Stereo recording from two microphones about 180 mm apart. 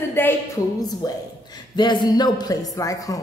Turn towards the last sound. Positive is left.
turn(degrees=20)  # may be behind; listen again after turning